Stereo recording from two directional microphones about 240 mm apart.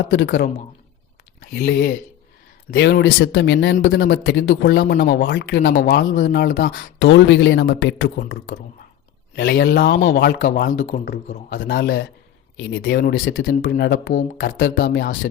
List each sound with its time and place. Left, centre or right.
0.1 s speech: left
8.2 s speech: left